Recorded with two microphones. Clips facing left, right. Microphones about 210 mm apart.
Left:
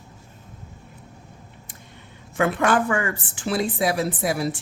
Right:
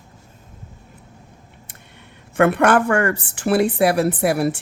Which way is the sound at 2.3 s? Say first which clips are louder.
Right 5 dB; 60° right (ahead or behind).